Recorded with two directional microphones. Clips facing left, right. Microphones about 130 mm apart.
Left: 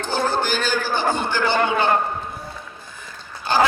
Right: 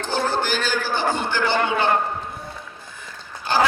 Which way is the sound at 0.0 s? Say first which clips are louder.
Left 1 dB; 45° left (ahead or behind).